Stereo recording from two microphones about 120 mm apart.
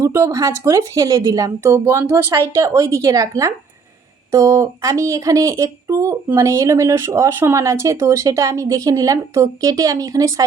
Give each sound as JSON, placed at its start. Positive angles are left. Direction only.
{"t": 0.0, "sound": "speech", "side_deg": -25}